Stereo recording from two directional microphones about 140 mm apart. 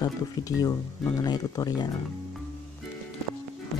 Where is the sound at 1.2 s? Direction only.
25° left (ahead or behind).